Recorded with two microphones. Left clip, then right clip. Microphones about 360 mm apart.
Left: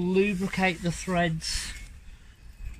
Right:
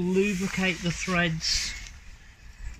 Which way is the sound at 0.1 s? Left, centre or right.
Left.